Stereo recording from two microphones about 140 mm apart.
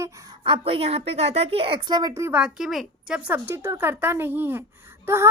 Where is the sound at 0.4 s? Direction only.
40° right (ahead or behind).